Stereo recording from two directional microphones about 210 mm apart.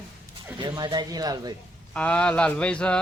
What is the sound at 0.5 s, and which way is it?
Speech, 20° right (ahead or behind).